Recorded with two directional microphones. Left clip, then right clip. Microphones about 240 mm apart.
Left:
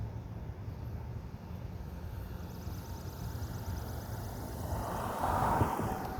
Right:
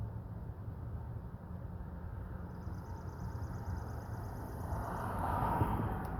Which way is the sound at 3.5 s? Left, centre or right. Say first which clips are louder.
Left 3 dB; left.